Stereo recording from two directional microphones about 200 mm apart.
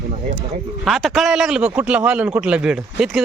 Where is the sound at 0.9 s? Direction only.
Centre (ahead or behind).